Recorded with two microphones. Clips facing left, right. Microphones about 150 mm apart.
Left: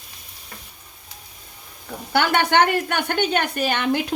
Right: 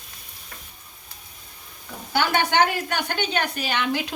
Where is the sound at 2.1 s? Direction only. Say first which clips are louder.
Left 3 dB; 60° left (ahead or behind).